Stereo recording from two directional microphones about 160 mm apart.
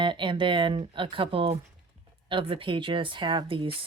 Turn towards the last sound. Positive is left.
turn(degrees=-30)  # may be behind; listen again after turning